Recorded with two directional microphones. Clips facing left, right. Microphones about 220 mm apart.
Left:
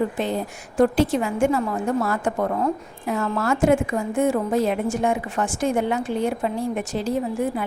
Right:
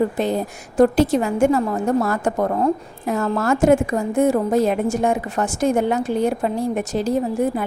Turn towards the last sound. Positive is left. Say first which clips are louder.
# right 4 dB
turn(degrees=-40)  # may be behind; listen again after turning